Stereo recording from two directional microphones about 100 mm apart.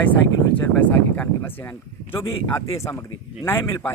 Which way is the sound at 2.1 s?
25° left (ahead or behind).